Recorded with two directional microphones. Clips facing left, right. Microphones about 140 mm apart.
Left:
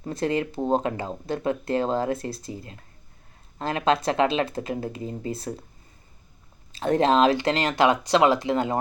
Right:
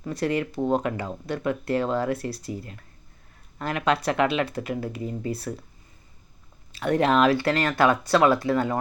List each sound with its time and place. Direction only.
0.0 s speech: 25° left (ahead or behind)
6.7 s speech: 30° left (ahead or behind)